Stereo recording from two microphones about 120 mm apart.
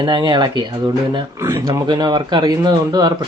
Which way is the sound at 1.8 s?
35° right (ahead or behind).